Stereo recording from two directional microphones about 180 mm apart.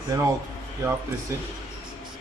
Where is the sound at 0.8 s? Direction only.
15° right (ahead or behind).